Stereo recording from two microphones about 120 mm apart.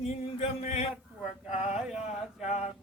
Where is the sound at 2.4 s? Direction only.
70° left (ahead or behind).